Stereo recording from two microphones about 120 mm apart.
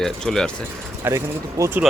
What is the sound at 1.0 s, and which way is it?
Speech, 15° right (ahead or behind).